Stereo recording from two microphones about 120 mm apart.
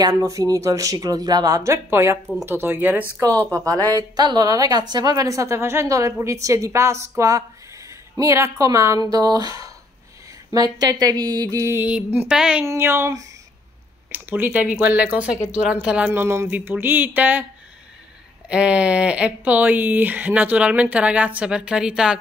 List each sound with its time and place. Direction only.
0.0 s a woman's voice: 30° right (ahead or behind)
3.5 s a woman's voice: 30° right (ahead or behind)
11.8 s speech: 15° right (ahead or behind)
12.6 s a woman's voice: 20° right (ahead or behind)
14.1 s speech: 15° right (ahead or behind)
16.1 s speech: 20° right (ahead or behind)
18.5 s speech: 10° right (ahead or behind)